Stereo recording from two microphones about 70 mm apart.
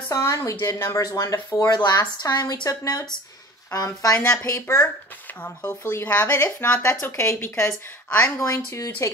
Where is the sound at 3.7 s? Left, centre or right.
Left.